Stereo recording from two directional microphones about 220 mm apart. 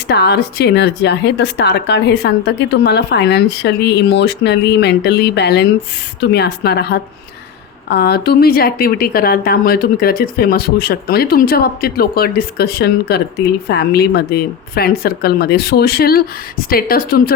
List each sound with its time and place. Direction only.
0.1 s speech: 50° left (ahead or behind)